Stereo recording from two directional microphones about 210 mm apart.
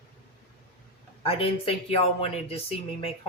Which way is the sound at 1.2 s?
25° left (ahead or behind).